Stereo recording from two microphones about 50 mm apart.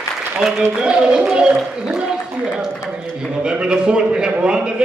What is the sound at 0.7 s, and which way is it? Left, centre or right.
Speech, centre.